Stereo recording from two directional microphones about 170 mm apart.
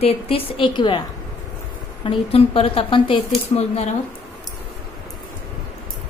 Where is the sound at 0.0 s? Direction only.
35° left (ahead or behind).